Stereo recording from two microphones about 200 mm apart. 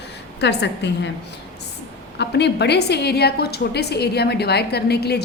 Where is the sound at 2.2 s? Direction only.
60° left (ahead or behind).